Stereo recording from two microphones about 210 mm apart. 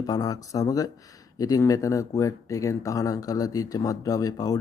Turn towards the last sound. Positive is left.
turn(degrees=15)  # may be behind; listen again after turning